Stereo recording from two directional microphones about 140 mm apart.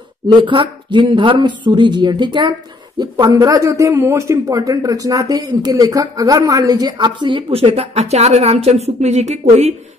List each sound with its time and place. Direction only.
0.3 s a man's voice: 35° right (ahead or behind); by 9.8 s 55° right (ahead or behind)